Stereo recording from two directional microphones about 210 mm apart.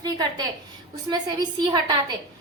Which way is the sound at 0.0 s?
20° right (ahead or behind).